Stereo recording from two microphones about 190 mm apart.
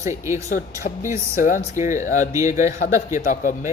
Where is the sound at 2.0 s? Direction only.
40° left (ahead or behind).